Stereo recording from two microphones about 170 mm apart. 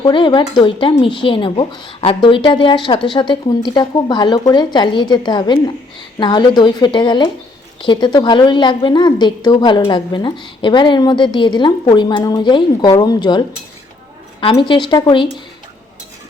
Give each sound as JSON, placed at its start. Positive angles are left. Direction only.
{"t": 0.0, "sound": "speech", "side_deg": 30}
{"t": 14.4, "sound": "speech", "side_deg": 30}